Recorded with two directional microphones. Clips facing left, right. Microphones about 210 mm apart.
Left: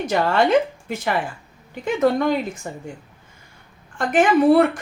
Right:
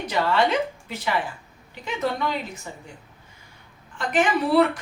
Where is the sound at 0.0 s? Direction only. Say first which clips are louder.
Left 3 dB; 45° left (ahead or behind).